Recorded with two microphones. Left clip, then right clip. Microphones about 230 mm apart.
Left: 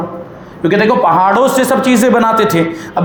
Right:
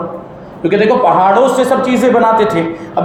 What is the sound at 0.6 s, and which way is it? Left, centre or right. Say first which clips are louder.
Speech: even; left.